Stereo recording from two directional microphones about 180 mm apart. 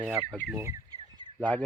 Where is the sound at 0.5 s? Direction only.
15° right (ahead or behind).